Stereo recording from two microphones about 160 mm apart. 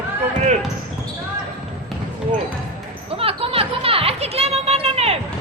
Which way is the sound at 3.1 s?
35° right (ahead or behind).